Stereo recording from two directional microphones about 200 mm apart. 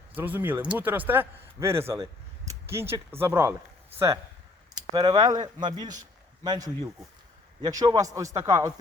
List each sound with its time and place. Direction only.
0.2 s speech: 10° right (ahead or behind)